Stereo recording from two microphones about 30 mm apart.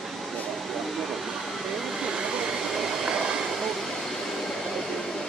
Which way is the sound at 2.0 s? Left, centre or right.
Right.